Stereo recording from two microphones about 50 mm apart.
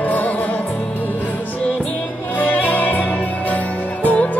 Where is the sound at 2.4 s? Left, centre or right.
Left.